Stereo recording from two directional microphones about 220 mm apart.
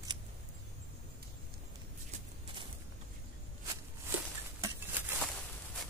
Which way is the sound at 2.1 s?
20° right (ahead or behind).